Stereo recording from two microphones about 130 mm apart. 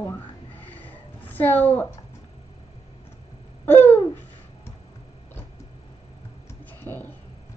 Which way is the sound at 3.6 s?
15° left (ahead or behind).